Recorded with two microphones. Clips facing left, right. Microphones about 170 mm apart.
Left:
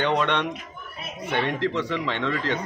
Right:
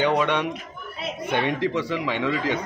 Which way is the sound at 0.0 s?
10° right (ahead or behind).